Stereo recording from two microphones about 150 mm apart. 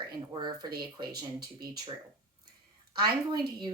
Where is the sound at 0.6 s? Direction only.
90° right.